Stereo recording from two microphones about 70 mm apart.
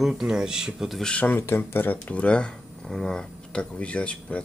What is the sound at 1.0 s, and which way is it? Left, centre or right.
Speech, centre.